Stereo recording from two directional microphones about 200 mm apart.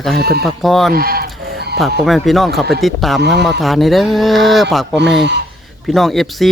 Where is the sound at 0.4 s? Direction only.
Centre (ahead or behind).